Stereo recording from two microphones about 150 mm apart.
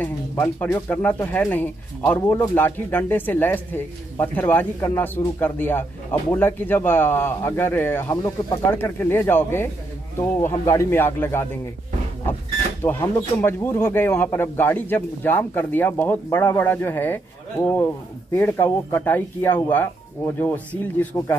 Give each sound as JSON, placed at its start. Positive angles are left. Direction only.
{"t": 0.0, "sound": "speech", "side_deg": 15}
{"t": 12.9, "sound": "speech", "side_deg": 10}